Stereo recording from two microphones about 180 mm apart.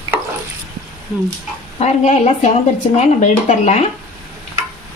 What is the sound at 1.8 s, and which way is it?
Speech, 40° left (ahead or behind).